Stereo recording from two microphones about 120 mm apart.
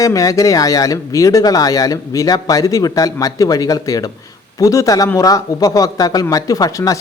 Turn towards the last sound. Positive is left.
turn(degrees=30)  # may be behind; listen again after turning